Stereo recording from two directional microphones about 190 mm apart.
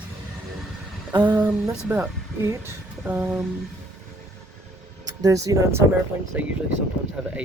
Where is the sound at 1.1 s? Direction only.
20° right (ahead or behind).